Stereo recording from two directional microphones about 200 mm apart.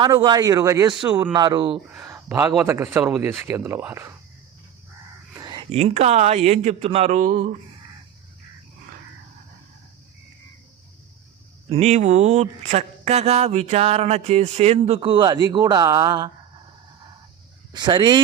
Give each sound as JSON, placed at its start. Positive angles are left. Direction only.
{"t": 0.0, "sound": "speech", "side_deg": -20}
{"t": 1.9, "sound": "a man's voice", "side_deg": -10}
{"t": 5.3, "sound": "whispering", "side_deg": -20}
{"t": 5.8, "sound": "speech", "side_deg": -35}
{"t": 11.7, "sound": "speech", "side_deg": -35}
{"t": 17.7, "sound": "speech", "side_deg": -20}